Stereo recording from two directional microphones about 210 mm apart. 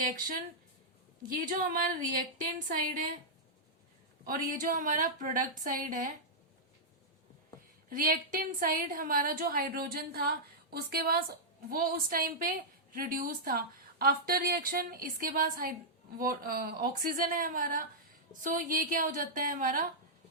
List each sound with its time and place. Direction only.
0.0 s a woman's voice: 40° right (ahead or behind)
4.3 s a woman's voice: 40° right (ahead or behind)
7.9 s a woman's voice: 45° right (ahead or behind)